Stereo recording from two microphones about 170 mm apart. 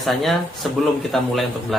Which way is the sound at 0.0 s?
Centre (ahead or behind).